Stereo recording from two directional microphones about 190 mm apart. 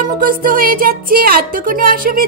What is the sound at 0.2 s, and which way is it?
Speech, 50° right (ahead or behind).